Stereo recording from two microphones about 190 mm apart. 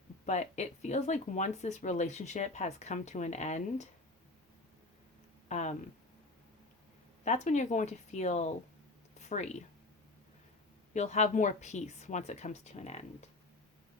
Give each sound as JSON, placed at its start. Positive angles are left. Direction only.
{"t": 0.3, "sound": "speech", "side_deg": 40}
{"t": 5.5, "sound": "speech", "side_deg": 40}
{"t": 7.3, "sound": "speech", "side_deg": 40}
{"t": 9.1, "sound": "a sound", "side_deg": 35}
{"t": 10.9, "sound": "speech", "side_deg": 35}